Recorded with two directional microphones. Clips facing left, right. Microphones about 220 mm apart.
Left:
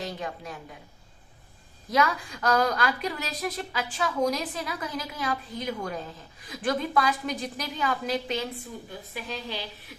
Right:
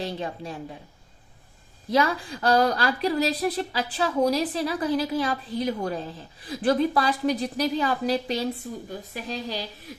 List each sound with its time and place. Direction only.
0.0 s a woman's voice: 30° right (ahead or behind)
1.9 s speech: 30° right (ahead or behind)